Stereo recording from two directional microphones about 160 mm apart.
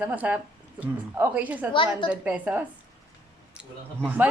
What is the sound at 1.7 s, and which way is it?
Speech, 30° left (ahead or behind).